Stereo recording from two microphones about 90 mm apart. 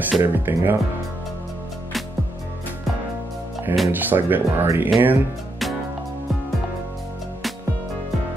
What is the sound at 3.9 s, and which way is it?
Speech, 20° right (ahead or behind).